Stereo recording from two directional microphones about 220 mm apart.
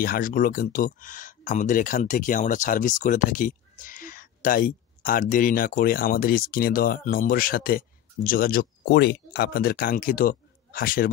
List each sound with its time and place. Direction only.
0.0 s speech: 40° left (ahead or behind)